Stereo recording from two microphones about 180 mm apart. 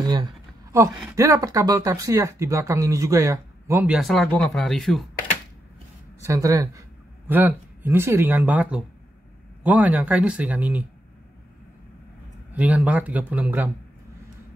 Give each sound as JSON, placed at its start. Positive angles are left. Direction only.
{"t": 0.0, "sound": "speech", "side_deg": -25}
{"t": 6.2, "sound": "speech", "side_deg": -15}
{"t": 12.5, "sound": "speech", "side_deg": -10}